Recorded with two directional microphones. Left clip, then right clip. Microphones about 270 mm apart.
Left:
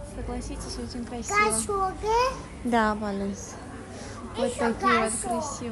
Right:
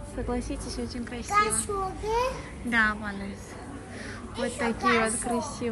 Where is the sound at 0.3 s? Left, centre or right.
Centre.